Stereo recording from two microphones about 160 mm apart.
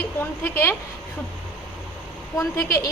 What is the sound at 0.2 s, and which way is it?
Speech, 15° left (ahead or behind).